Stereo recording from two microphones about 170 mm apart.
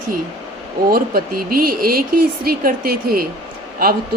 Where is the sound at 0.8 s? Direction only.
60° right (ahead or behind).